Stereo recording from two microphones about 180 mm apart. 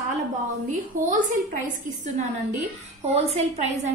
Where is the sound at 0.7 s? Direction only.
45° right (ahead or behind).